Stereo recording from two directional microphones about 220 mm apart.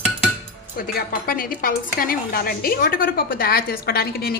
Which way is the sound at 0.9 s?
40° left (ahead or behind).